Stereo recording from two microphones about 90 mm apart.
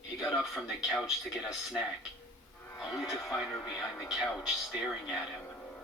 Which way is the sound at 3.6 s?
35° left (ahead or behind).